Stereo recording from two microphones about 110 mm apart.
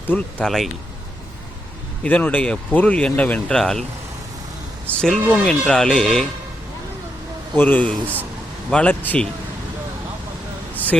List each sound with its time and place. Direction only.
0.1 s speech: 10° left (ahead or behind)
2.0 s speech: 15° left (ahead or behind)
4.9 s speech: 5° left (ahead or behind)
7.5 s speech: 15° left (ahead or behind)
8.0 s speech: 15° right (ahead or behind)
8.7 s speech: 15° left (ahead or behind)